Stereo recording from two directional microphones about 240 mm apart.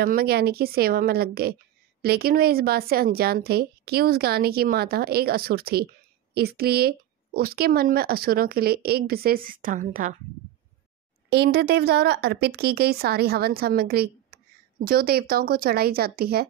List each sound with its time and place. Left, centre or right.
0.0 s a woman's voice: right
11.2 s a woman's voice: right